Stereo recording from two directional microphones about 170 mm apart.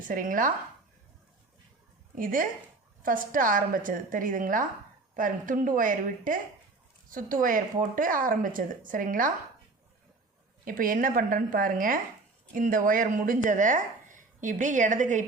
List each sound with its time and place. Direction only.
0.1 s speech: 50° right (ahead or behind)
2.1 s speech: 55° right (ahead or behind)
10.7 s a woman's voice: 55° right (ahead or behind)